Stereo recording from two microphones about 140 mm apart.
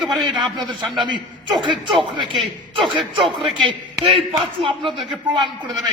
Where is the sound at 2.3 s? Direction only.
Centre (ahead or behind).